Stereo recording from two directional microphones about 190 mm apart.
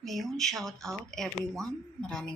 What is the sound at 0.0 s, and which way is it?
Speech, centre (ahead or behind).